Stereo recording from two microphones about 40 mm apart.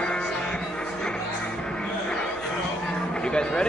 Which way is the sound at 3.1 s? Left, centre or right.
Left.